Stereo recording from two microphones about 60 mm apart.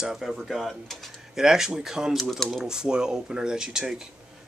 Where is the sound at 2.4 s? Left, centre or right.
Centre.